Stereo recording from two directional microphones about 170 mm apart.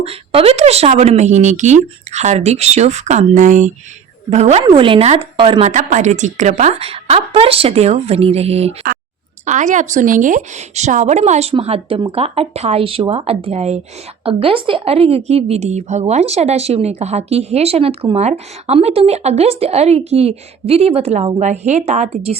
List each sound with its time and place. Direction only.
0.0 s a woman's voice: 35° right (ahead or behind)
5.6 s a woman's voice: 45° right (ahead or behind)